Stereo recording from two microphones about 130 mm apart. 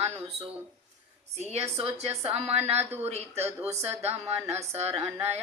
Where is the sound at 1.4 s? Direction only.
55° right (ahead or behind).